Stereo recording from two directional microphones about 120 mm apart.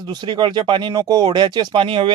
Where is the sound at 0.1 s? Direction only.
40° right (ahead or behind).